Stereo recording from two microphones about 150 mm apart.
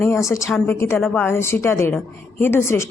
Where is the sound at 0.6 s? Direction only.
15° left (ahead or behind).